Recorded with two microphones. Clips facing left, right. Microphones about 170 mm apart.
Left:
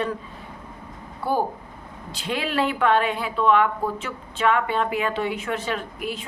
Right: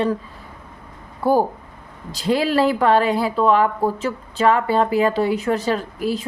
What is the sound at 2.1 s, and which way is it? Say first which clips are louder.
Speech: right 7 dB; 35° right (ahead or behind).